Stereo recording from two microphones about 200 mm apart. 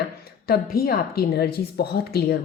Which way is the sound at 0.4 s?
50° left (ahead or behind).